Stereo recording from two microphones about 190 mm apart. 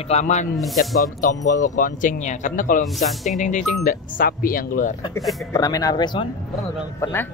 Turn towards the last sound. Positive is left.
turn(degrees=10)  # may be behind; listen again after turning